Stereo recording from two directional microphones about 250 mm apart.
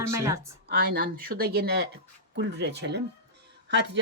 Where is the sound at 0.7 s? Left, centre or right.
Right.